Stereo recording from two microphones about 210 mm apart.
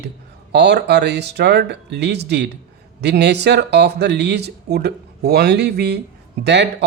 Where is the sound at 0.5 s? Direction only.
55° right (ahead or behind).